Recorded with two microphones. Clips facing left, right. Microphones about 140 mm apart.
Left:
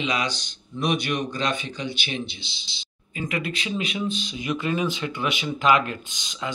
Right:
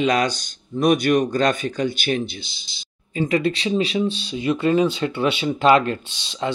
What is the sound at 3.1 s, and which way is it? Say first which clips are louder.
Speech: right 9 dB; 30° right (ahead or behind).